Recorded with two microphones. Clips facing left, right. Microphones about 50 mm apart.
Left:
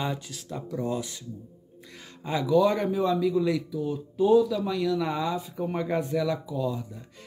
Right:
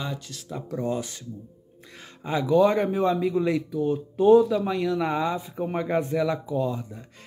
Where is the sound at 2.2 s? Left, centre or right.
Right.